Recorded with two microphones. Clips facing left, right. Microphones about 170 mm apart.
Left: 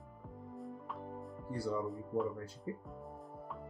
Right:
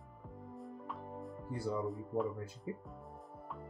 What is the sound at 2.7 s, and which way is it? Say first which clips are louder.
Speech: even; 15° right (ahead or behind).